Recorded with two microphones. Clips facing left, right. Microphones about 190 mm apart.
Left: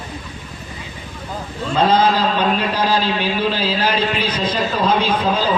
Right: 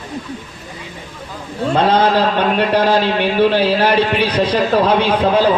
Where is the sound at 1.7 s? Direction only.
65° right (ahead or behind).